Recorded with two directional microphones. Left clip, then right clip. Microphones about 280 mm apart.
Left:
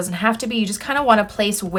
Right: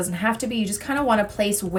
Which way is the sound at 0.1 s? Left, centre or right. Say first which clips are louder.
Left 4 dB; centre.